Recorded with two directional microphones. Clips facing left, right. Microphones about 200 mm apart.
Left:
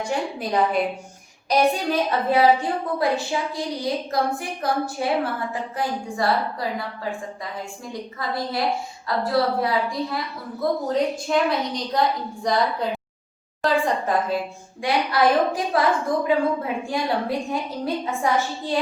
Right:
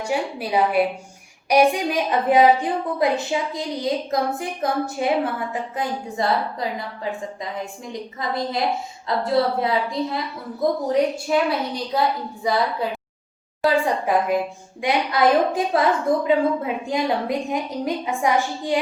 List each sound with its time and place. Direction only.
0.0 s a woman's voice: 10° right (ahead or behind)
8.2 s a woman's voice: 20° right (ahead or behind)